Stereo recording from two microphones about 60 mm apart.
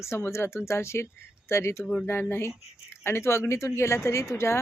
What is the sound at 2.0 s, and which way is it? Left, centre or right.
Speech, left.